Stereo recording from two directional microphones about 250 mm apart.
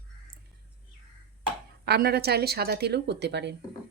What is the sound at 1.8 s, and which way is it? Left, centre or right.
Speech, right.